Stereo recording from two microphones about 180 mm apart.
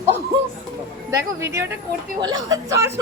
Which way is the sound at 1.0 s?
15° right (ahead or behind).